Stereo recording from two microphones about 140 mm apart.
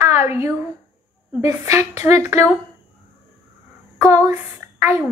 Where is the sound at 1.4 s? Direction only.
20° right (ahead or behind).